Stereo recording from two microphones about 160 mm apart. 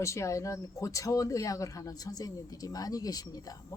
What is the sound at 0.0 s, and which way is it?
Speech, 20° left (ahead or behind).